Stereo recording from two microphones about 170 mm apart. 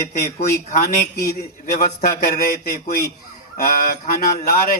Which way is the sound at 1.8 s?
55° left (ahead or behind).